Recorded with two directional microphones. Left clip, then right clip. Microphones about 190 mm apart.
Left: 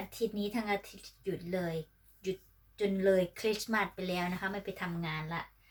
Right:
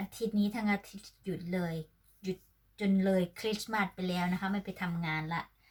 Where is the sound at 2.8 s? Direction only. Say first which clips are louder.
Left 3 dB; centre (ahead or behind).